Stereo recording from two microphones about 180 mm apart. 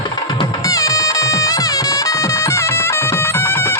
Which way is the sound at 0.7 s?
20° left (ahead or behind).